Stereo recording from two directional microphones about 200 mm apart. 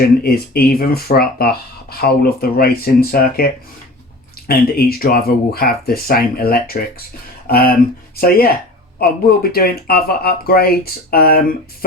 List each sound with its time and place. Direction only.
0.2 s speech: 50° left (ahead or behind)